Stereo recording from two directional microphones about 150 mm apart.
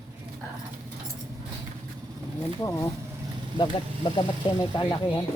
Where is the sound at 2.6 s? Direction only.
20° left (ahead or behind).